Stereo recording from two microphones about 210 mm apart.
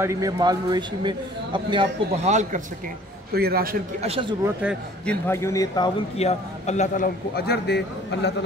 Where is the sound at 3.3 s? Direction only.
45° right (ahead or behind).